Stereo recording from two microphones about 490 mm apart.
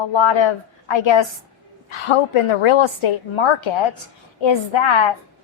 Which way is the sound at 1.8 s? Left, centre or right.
Left.